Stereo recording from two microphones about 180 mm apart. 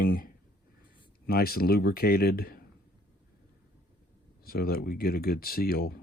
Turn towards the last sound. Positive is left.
turn(degrees=55)  # may be behind; listen again after turning